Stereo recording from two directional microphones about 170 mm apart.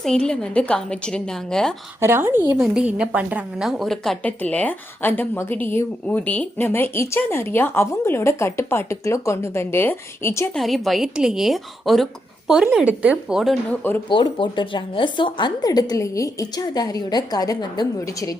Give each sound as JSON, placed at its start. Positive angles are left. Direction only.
{"t": 0.0, "sound": "a woman's voice", "side_deg": 5}
{"t": 2.0, "sound": "a woman's voice", "side_deg": -15}
{"t": 10.6, "sound": "a woman's voice", "side_deg": 0}
{"t": 14.1, "sound": "a woman's voice", "side_deg": 30}